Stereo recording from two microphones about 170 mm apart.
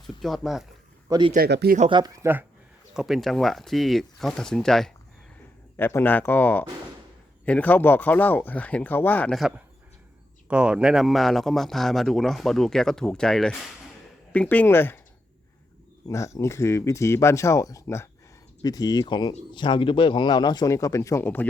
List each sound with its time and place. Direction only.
0.2 s speech: centre (ahead or behind)
1.1 s speech: 20° right (ahead or behind)
1.5 s speech: 80° right
1.9 s speech: 25° right (ahead or behind); by 4.9 s 5° left (ahead or behind)
5.7 s speech: 15° left (ahead or behind)
10.5 s speech: 5° right (ahead or behind); by 15.0 s 15° left (ahead or behind)
16.0 s speech: 20° left (ahead or behind)